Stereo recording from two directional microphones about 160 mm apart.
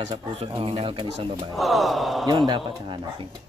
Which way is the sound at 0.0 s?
35° right (ahead or behind).